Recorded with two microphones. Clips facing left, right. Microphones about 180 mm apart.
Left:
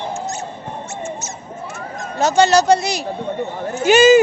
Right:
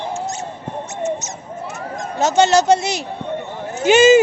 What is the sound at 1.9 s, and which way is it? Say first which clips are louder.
Speech: even; 20° right (ahead or behind).